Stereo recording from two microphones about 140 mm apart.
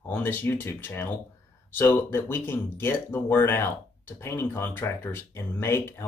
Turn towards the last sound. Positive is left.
turn(degrees=15)  # may be behind; listen again after turning